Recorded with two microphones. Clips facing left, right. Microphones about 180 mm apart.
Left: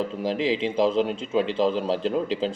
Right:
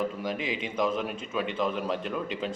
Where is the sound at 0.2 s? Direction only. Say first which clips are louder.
Left 8 dB; 30° left (ahead or behind).